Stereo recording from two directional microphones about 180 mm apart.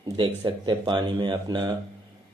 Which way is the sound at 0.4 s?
25° right (ahead or behind).